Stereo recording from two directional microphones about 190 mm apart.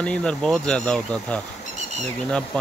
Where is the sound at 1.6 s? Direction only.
35° left (ahead or behind).